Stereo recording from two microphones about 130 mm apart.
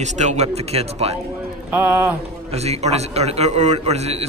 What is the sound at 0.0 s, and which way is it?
A man's voice, 60° right (ahead or behind).